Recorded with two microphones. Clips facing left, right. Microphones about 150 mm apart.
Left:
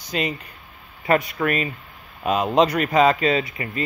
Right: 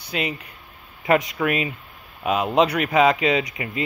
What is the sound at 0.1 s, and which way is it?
Speech, 10° right (ahead or behind).